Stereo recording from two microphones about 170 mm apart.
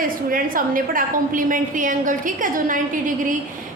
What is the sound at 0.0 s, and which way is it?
A woman's voice, 55° right (ahead or behind).